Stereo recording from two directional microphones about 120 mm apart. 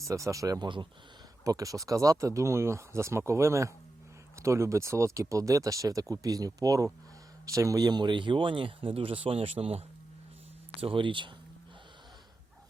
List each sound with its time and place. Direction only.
0.0 s speech: 25° right (ahead or behind); by 11.3 s 45° right (ahead or behind)